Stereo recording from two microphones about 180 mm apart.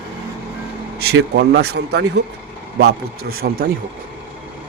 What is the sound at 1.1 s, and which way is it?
Speech, 70° right (ahead or behind).